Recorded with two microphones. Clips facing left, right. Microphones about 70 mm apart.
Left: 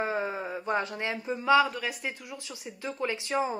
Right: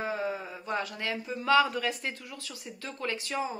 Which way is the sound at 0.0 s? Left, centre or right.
Left.